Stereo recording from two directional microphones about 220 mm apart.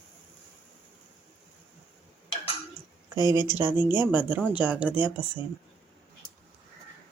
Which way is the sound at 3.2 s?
20° left (ahead or behind).